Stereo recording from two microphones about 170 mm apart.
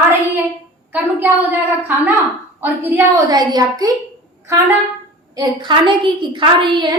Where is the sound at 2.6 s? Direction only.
20° right (ahead or behind).